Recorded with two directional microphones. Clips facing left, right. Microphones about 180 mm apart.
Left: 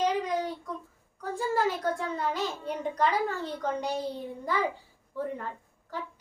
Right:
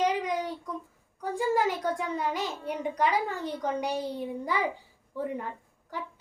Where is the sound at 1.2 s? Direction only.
15° right (ahead or behind).